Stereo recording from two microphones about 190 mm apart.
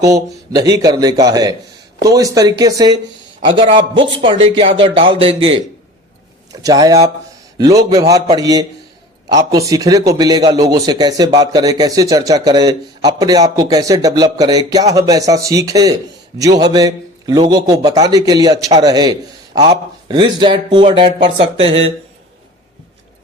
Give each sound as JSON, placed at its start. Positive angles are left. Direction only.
{"t": 0.0, "sound": "a man's voice", "side_deg": -20}
{"t": 6.5, "sound": "a man's voice", "side_deg": -20}